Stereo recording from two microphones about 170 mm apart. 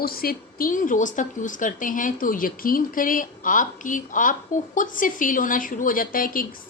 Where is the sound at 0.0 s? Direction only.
60° left (ahead or behind).